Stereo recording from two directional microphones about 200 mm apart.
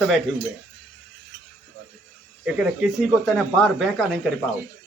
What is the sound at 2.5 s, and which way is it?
Speech, centre (ahead or behind).